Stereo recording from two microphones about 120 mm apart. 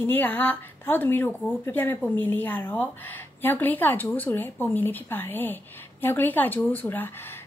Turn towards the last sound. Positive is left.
turn(degrees=20)  # may be behind; listen again after turning